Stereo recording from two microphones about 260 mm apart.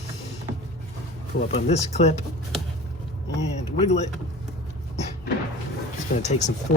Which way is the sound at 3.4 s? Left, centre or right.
Left.